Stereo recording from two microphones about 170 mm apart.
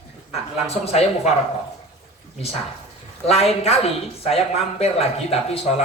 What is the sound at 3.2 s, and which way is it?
Speech, 35° left (ahead or behind).